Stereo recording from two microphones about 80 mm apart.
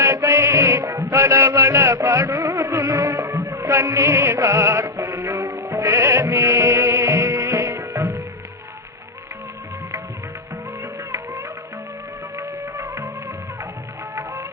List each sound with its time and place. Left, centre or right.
0.0 s music: right
12.4 s music of bollywood: right